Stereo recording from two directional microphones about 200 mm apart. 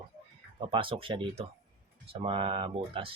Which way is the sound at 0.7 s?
25° right (ahead or behind).